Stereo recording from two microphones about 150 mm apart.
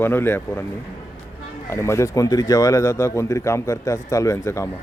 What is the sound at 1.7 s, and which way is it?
Speech, 20° left (ahead or behind).